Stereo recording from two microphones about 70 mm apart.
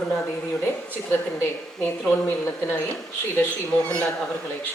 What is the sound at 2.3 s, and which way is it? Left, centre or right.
A woman's voice, left.